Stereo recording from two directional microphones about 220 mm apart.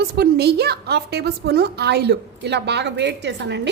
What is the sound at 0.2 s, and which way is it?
A woman's voice, 45° right (ahead or behind).